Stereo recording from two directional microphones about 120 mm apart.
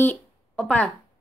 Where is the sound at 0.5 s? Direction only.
10° left (ahead or behind).